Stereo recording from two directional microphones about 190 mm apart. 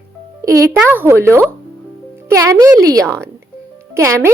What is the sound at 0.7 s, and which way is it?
Speech, 10° right (ahead or behind).